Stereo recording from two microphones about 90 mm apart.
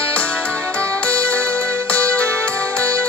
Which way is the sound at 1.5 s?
25° right (ahead or behind).